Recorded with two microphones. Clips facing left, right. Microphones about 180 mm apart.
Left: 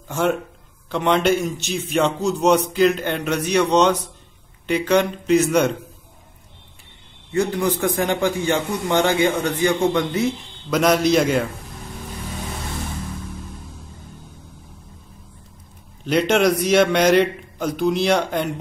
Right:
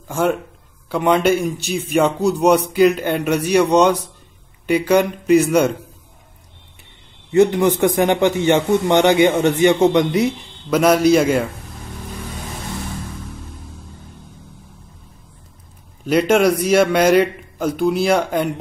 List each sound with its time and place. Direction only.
0.1 s a man's voice: 5° right (ahead or behind)
7.3 s a man's voice: 20° right (ahead or behind)
10.7 s a man's voice: 5° right (ahead or behind)
16.1 s a man's voice: 5° right (ahead or behind)